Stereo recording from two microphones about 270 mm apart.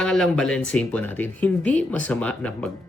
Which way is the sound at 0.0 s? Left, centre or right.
Centre.